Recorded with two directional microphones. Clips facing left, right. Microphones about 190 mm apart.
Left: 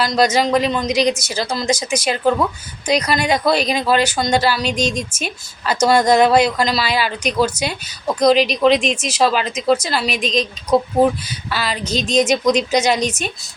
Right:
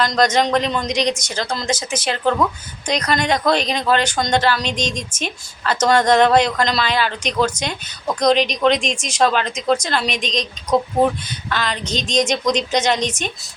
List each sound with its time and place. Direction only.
0.0 s speech: 5° left (ahead or behind)